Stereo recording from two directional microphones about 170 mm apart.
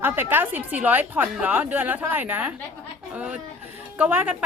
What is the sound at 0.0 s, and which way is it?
A woman's voice, 10° right (ahead or behind).